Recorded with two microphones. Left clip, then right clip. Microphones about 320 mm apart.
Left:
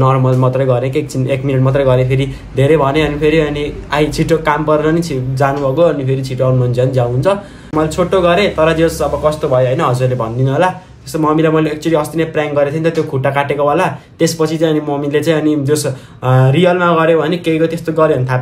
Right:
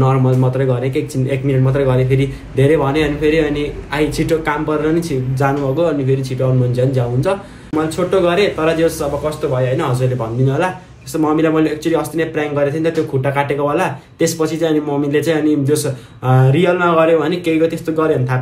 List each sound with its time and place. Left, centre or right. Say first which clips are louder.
0.0 s speech: left 3 dB; centre